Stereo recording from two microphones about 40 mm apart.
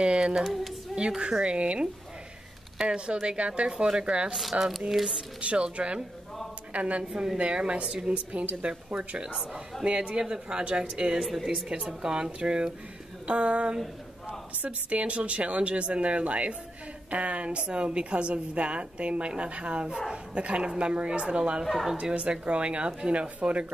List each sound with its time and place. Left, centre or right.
0.0 s speech: right
0.4 s speech: centre
0.9 s a woman's voice: right
2.9 s a woman's voice: right
4.9 s a woman's voice: centre
5.4 s a woman's voice: right
21.6 s speech: centre
22.1 s a woman's voice: right